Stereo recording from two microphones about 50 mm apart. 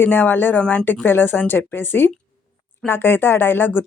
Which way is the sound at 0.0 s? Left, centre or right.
Left.